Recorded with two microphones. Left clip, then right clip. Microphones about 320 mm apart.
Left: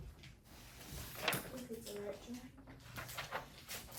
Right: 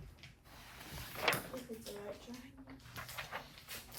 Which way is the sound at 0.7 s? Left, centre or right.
Centre.